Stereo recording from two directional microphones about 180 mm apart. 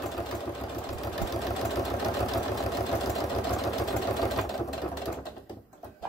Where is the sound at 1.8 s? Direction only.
Centre (ahead or behind).